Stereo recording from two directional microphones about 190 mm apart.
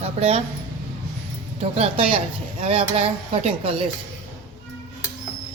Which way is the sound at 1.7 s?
30° right (ahead or behind).